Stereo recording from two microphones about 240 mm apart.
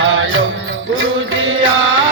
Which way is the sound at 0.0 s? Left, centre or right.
Right.